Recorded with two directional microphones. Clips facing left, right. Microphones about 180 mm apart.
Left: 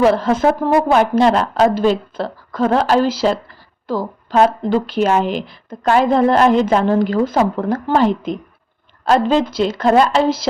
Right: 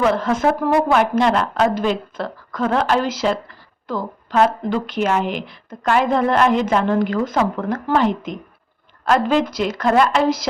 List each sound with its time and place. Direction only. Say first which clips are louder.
0.0 s a woman's voice: left 4 dB; 30° left (ahead or behind)